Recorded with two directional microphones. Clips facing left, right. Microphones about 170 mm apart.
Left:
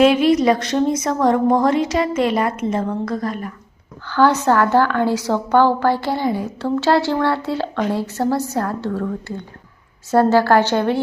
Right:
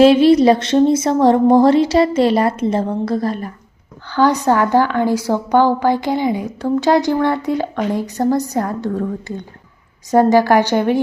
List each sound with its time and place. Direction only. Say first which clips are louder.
0.0 s speech: right 4 dB; 30° right (ahead or behind)
4.1 s a woman's voice: right 1 dB; 15° right (ahead or behind)